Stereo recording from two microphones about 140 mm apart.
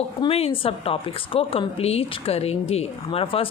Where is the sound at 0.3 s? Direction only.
45° left (ahead or behind).